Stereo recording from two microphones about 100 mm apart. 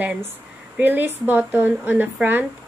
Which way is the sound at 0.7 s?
20° right (ahead or behind).